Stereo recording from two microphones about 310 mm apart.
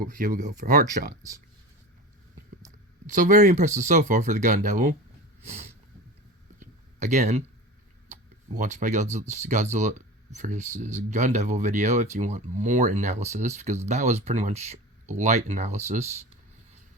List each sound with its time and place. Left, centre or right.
0.0 s speech: right
3.1 s speech: right
6.6 s a sound: right
8.1 s speech: right